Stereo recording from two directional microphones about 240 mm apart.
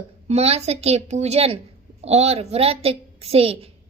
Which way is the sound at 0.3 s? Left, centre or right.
Right.